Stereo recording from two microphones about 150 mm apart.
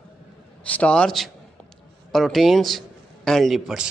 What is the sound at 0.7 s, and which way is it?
A man's voice, 10° left (ahead or behind).